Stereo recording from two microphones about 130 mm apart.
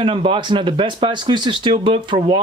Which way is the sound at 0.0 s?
40° right (ahead or behind).